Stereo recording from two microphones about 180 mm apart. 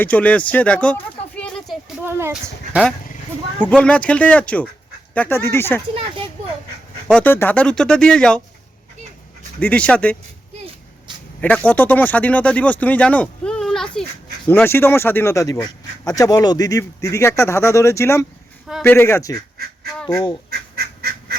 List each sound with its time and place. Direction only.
0.0 s speech: 10° left (ahead or behind)
2.0 s speech: 15° right (ahead or behind)
3.6 s speech: 5° left (ahead or behind)
7.1 s speech: 10° left (ahead or behind)
9.6 s speech: 5° left (ahead or behind)
11.3 s speech: 5° left (ahead or behind)
20.5 s goose: 60° right (ahead or behind)